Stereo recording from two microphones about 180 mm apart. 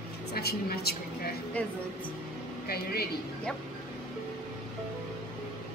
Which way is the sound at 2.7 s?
60° left (ahead or behind).